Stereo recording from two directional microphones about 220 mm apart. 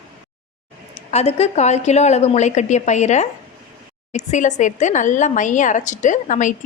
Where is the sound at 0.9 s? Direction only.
30° left (ahead or behind).